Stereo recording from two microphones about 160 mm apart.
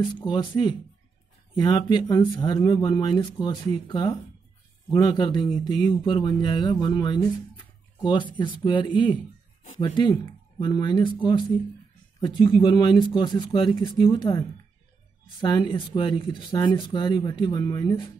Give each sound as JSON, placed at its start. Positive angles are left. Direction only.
{"t": 0.0, "sound": "speech", "side_deg": 30}
{"t": 15.4, "sound": "speech", "side_deg": 25}